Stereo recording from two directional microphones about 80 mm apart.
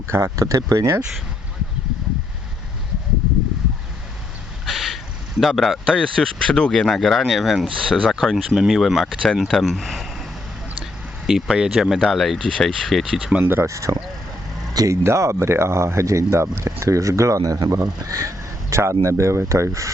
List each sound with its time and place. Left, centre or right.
0.1 s speech: right
4.6 s vehicle: centre
5.4 s speech: centre
9.5 s sniff: centre
11.3 s speech: centre
13.4 s speech: right
14.7 s vehicle: right
15.0 s speech: right